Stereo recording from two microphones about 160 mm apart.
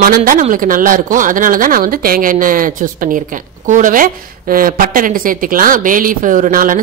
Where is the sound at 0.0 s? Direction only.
60° right (ahead or behind).